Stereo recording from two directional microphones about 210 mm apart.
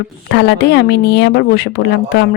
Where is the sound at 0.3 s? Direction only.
55° left (ahead or behind).